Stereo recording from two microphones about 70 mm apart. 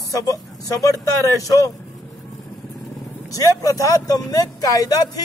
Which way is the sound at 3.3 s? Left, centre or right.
Left.